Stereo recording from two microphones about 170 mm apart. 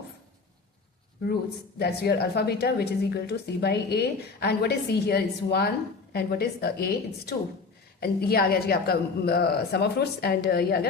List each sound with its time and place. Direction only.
1.8 s a woman's voice: 70° left (ahead or behind)